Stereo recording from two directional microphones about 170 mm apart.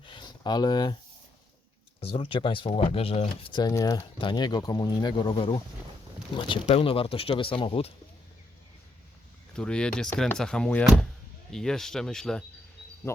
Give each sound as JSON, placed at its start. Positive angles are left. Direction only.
{"t": 0.0, "sound": "a sound", "side_deg": 25}
{"t": 2.0, "sound": "speech", "side_deg": 35}
{"t": 6.7, "sound": "speech", "side_deg": 35}
{"t": 9.6, "sound": "speech", "side_deg": 5}
{"t": 13.1, "sound": "speech", "side_deg": 15}